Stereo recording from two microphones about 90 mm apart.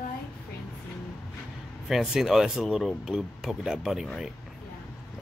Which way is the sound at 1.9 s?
5° right (ahead or behind).